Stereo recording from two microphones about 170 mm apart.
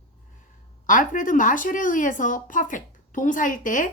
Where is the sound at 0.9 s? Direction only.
50° left (ahead or behind).